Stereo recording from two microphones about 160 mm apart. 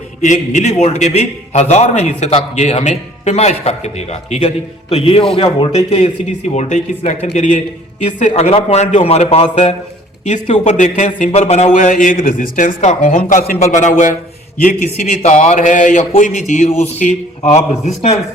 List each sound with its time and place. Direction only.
0.2 s a man's voice: 50° left (ahead or behind)